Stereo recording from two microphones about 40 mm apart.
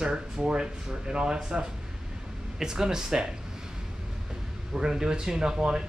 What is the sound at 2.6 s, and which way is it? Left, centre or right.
Speech, centre.